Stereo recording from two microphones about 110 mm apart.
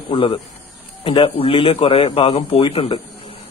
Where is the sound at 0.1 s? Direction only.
60° left (ahead or behind).